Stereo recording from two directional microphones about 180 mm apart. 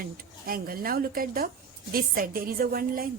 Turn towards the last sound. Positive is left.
turn(degrees=-55)  # may be behind; listen again after turning